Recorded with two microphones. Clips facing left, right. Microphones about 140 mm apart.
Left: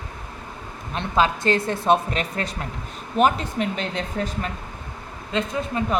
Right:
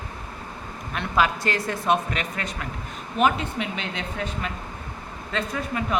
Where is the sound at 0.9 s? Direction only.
25° left (ahead or behind).